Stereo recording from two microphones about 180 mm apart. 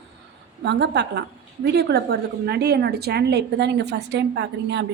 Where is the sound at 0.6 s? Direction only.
70° right (ahead or behind).